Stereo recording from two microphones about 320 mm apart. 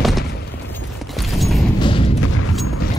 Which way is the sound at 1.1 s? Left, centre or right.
Centre.